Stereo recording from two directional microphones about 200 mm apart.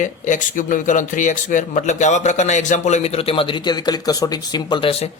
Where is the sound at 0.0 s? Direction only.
40° left (ahead or behind).